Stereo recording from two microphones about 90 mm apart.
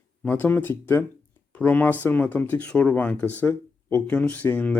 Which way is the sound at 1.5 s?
20° left (ahead or behind).